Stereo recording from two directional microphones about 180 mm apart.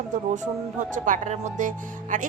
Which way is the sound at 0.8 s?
45° right (ahead or behind).